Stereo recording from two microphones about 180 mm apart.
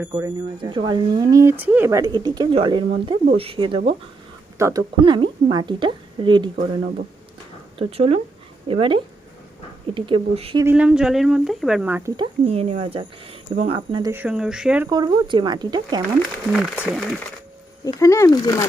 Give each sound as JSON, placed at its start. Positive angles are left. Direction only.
{"t": 0.1, "sound": "speech", "side_deg": -25}
{"t": 4.5, "sound": "speech", "side_deg": -15}
{"t": 7.8, "sound": "speech", "side_deg": -35}
{"t": 10.6, "sound": "speech", "side_deg": -10}
{"t": 12.1, "sound": "speech", "side_deg": -30}
{"t": 14.1, "sound": "speech", "side_deg": -10}
{"t": 14.8, "sound": "speech", "side_deg": -25}
{"t": 16.5, "sound": "speech", "side_deg": -5}
{"t": 17.8, "sound": "speech", "side_deg": 15}